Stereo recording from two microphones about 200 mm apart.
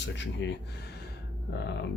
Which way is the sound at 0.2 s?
60° left (ahead or behind).